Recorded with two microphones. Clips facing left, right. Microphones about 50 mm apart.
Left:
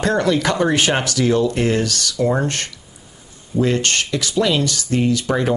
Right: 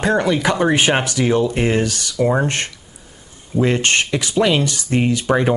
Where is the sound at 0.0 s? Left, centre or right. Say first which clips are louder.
Right 1 dB; centre.